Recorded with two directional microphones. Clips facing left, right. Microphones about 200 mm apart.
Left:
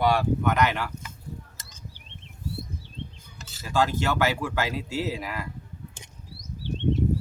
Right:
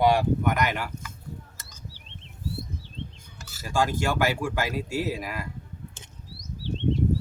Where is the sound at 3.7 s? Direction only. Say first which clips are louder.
Left 1 dB; 15° right (ahead or behind).